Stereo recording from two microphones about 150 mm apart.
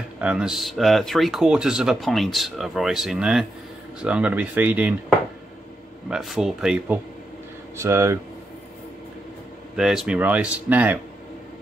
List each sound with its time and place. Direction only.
0.2 s speech: 5° right (ahead or behind)
6.0 s speech: centre (ahead or behind)
7.8 s speech: 20° right (ahead or behind)
9.8 s speech: 5° right (ahead or behind)